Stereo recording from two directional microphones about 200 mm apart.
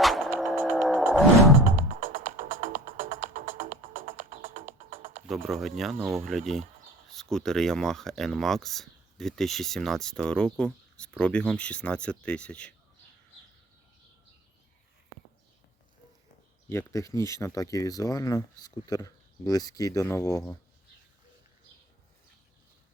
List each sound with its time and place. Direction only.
0.0 s music: centre (ahead or behind)
0.7 s vehicle: centre (ahead or behind)
1.1 s roaring cats: centre (ahead or behind)
1.6 s music: 40° right (ahead or behind)
5.3 s speech: centre (ahead or behind)
16.6 s speech: 15° left (ahead or behind)